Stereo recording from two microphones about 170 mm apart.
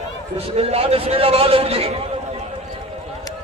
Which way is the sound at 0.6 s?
35° right (ahead or behind).